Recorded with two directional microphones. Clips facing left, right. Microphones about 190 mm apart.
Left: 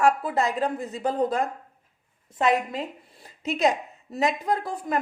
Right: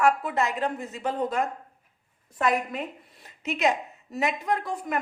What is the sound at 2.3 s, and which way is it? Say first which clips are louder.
A woman's voice: left 2 dB; 25° left (ahead or behind).